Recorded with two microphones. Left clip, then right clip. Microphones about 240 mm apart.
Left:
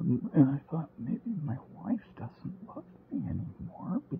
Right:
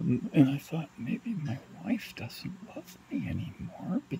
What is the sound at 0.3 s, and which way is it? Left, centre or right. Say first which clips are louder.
Speech: right 1 dB; centre.